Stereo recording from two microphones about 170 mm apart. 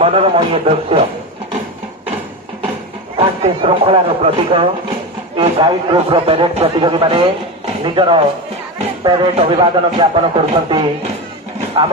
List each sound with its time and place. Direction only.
0.0 s speech: 30° right (ahead or behind)
3.2 s speech: 35° right (ahead or behind)